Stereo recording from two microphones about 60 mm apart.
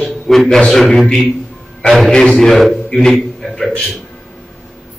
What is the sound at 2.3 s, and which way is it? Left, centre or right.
A man's voice, centre.